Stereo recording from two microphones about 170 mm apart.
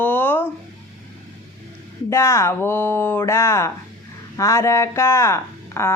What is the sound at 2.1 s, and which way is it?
Speech, 15° left (ahead or behind).